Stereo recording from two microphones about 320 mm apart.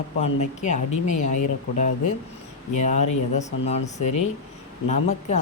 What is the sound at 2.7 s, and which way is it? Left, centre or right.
Speech, left.